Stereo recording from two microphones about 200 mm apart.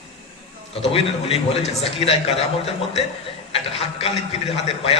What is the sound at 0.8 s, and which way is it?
A man's voice, 30° left (ahead or behind).